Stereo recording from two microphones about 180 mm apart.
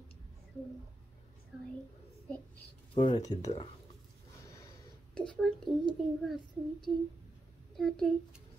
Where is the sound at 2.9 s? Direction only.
25° left (ahead or behind).